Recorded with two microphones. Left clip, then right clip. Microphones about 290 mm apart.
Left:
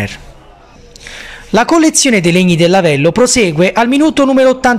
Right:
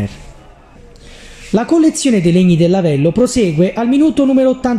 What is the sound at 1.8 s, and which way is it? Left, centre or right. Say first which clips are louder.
Speech: left 3 dB; left.